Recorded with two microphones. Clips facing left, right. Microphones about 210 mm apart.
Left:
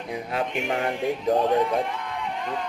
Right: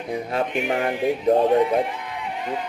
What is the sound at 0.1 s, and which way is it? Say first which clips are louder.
Speech: right 4 dB; 40° right (ahead or behind).